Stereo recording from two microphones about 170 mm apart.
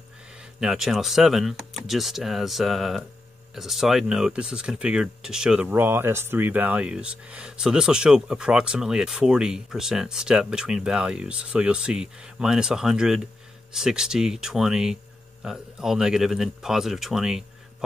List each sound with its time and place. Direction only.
0.4 s speech: 5° right (ahead or behind)